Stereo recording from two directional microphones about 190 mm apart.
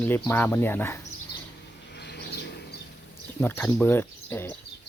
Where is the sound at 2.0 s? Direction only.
60° left (ahead or behind).